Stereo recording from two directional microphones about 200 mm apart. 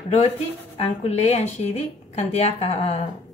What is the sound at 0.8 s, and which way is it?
A woman's voice, 30° left (ahead or behind).